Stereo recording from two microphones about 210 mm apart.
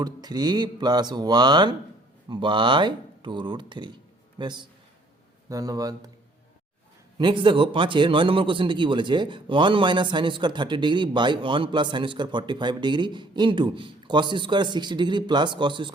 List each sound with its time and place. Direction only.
0.0 s speech: 20° right (ahead or behind)
7.2 s speech: 20° right (ahead or behind)